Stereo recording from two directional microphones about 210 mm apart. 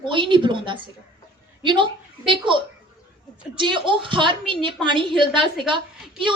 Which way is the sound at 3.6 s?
25° right (ahead or behind).